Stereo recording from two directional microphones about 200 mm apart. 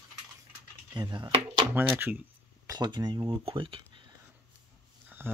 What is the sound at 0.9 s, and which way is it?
Speech, 20° right (ahead or behind).